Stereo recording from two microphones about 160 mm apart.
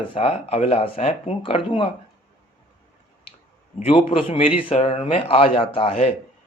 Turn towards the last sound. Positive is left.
turn(degrees=40)  # may be behind; listen again after turning